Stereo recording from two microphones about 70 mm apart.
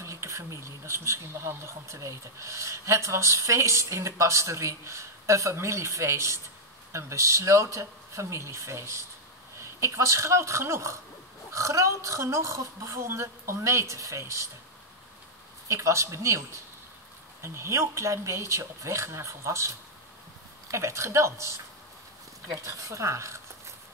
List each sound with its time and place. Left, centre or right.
0.0 s speech: right
15.7 s speech: right
20.7 s speech: right
22.7 s speech: right